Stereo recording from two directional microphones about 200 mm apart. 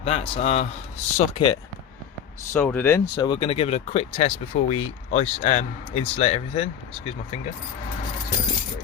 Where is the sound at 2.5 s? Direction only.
10° left (ahead or behind).